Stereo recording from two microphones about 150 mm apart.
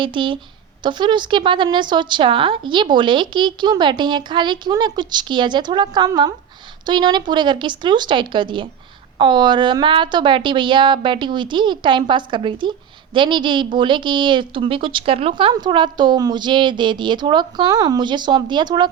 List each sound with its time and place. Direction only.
0.0 s a woman's voice: 35° right (ahead or behind)